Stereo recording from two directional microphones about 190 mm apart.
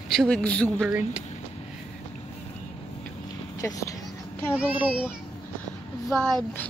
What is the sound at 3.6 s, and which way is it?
Speech, 15° left (ahead or behind).